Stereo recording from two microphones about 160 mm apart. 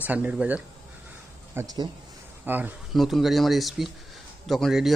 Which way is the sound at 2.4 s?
10° right (ahead or behind).